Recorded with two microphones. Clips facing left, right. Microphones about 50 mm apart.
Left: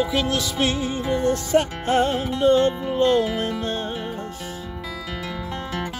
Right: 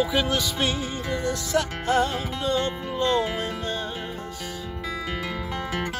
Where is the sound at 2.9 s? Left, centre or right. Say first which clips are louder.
Left 4 dB; left.